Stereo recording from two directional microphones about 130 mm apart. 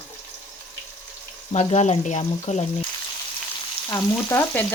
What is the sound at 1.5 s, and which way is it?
Speech, 60° left (ahead or behind).